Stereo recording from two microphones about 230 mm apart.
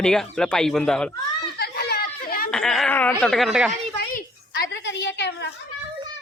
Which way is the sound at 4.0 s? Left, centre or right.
Left.